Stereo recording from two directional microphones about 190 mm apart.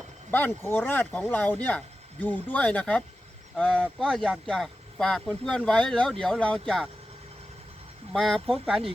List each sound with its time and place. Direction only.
0.3 s speech: 10° left (ahead or behind)
8.1 s speech: 5° left (ahead or behind)